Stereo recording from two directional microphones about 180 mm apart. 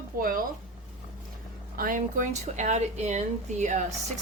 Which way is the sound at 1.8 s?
50° right (ahead or behind).